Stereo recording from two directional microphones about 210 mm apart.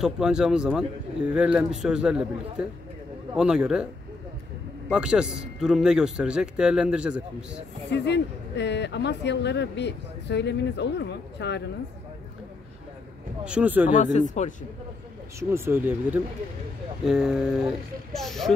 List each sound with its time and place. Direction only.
0.0 s speech: 5° right (ahead or behind)
4.8 s speech: 5° right (ahead or behind)
7.9 s speech: 55° left (ahead or behind)
13.4 s speech: 5° right (ahead or behind)
13.8 s speech: 35° left (ahead or behind)
15.3 s speech: 10° right (ahead or behind)